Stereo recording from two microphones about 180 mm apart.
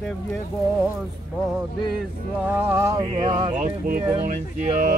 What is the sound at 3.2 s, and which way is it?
Speech, 30° right (ahead or behind).